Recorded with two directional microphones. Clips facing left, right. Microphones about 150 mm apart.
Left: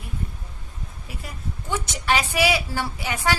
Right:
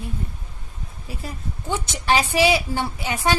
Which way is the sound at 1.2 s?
30° right (ahead or behind).